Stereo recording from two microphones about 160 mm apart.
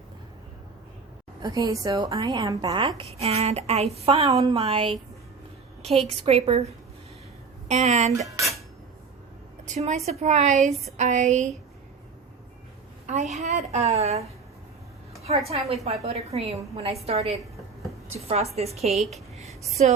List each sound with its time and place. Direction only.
1.4 s a woman's voice: 25° right (ahead or behind)
3.0 s a woman's voice: 40° right (ahead or behind)
6.1 s a woman's voice: 40° right (ahead or behind)
7.7 s a woman's voice: 45° right (ahead or behind)
8.3 s a woman's voice: 20° right (ahead or behind)
9.6 s a woman's voice: 45° right (ahead or behind)
13.1 s a woman's voice: 45° right (ahead or behind)
15.4 s a woman's voice: 40° right (ahead or behind)
19.1 s a sound: 40° right (ahead or behind)
19.8 s a woman's voice: 50° right (ahead or behind)